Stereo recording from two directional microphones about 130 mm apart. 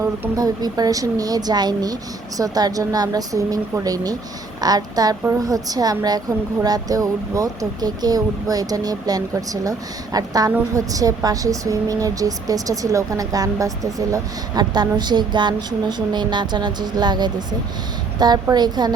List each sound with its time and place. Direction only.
0.0 s a woman's voice: 25° right (ahead or behind)